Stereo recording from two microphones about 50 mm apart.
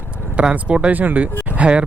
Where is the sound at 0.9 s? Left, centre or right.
Right.